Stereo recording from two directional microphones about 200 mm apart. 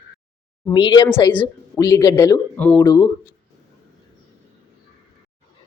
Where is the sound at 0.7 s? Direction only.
20° left (ahead or behind).